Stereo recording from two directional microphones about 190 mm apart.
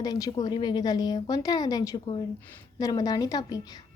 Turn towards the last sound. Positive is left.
turn(degrees=20)  # may be behind; listen again after turning